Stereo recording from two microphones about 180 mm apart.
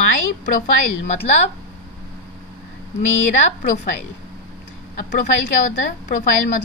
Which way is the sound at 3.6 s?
45° left (ahead or behind).